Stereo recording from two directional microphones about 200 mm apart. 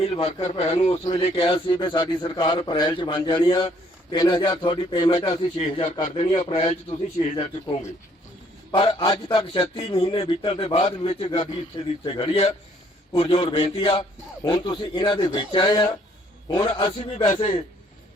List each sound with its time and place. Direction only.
0.0 s a man's voice: 30° left (ahead or behind)